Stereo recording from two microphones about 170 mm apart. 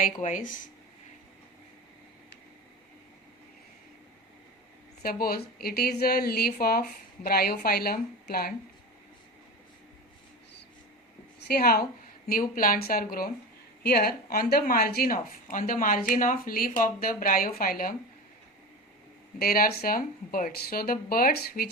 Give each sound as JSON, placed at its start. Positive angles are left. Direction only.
{"t": 0.0, "sound": "speech", "side_deg": 45}
{"t": 5.0, "sound": "speech", "side_deg": 60}
{"t": 11.3, "sound": "speech", "side_deg": 65}
{"t": 19.4, "sound": "speech", "side_deg": 60}